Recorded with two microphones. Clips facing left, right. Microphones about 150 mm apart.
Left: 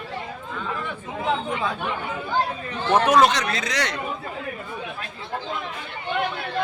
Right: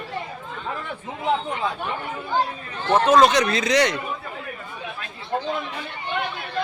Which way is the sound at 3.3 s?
20° right (ahead or behind).